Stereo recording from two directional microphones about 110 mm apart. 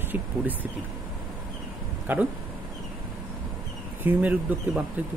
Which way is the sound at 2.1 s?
15° right (ahead or behind).